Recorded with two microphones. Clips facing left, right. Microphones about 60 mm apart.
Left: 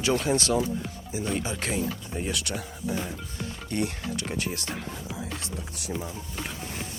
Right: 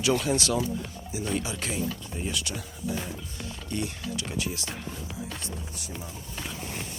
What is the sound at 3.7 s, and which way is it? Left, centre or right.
Speech, left.